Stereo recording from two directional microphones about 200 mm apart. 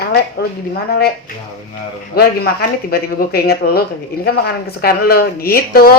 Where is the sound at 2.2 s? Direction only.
50° left (ahead or behind).